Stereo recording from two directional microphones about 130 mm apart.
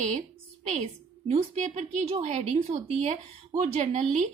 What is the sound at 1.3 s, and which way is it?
A woman's voice, 60° right (ahead or behind).